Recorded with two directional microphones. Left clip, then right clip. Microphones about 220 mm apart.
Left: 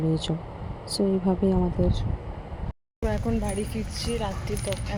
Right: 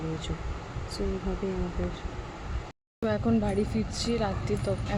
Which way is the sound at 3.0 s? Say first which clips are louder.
Right 1 dB; 15° right (ahead or behind).